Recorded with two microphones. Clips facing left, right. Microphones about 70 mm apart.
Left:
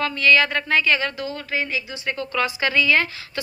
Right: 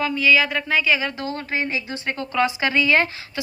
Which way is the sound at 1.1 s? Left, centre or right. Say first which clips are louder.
Right 1 dB; right.